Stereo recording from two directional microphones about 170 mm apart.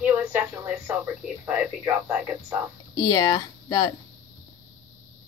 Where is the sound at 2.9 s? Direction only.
25° left (ahead or behind).